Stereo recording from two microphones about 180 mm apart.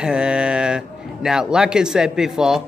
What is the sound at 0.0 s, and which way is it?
A man's voice, 5° right (ahead or behind).